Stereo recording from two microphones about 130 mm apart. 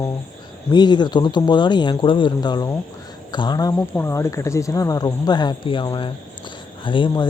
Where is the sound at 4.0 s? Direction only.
20° left (ahead or behind).